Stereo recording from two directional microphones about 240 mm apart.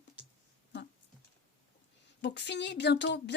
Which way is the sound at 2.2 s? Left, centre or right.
Left.